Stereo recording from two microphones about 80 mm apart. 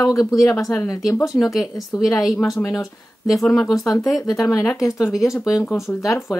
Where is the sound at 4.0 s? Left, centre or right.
Centre.